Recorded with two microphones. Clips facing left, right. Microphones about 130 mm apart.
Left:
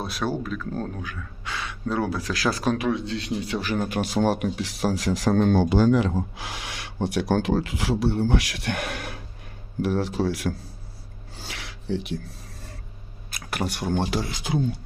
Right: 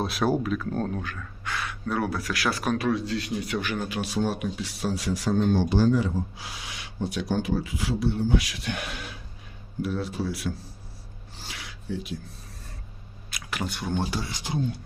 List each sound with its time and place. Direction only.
0.0 s speech: centre (ahead or behind)
0.3 s speech: 10° right (ahead or behind)
0.7 s speech: centre (ahead or behind)
1.5 s speech: 20° left (ahead or behind); by 3.8 s 35° left (ahead or behind)
3.8 s a man's voice: 55° left (ahead or behind)
4.3 s speech: 65° left (ahead or behind)
9.8 s speech: 75° left (ahead or behind)
11.4 s a sound: 70° left (ahead or behind)
13.3 s speech: 55° left (ahead or behind)